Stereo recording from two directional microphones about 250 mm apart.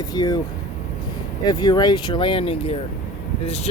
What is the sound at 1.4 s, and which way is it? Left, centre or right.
Speech, centre.